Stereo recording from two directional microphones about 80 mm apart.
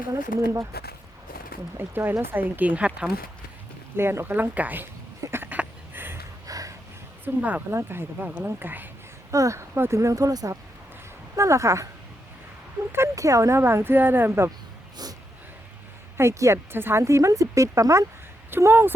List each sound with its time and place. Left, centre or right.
0.1 s speech: right
1.8 s speech: right
3.9 s speech: right
5.2 s a sound: right
6.5 s a sound: right
7.3 s speech: right
9.3 s speech: right
12.9 s speech: right
16.1 s speech: right
18.5 s speech: right